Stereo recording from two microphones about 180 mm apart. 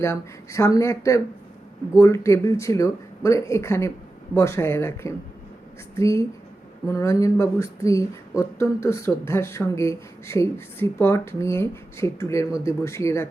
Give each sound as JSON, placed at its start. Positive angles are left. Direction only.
{"t": 0.0, "sound": "speech", "side_deg": 15}